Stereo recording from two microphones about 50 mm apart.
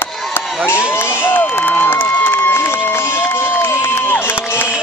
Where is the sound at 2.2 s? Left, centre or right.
Left.